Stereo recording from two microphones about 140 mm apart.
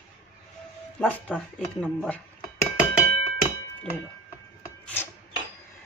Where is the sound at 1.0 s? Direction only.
10° left (ahead or behind).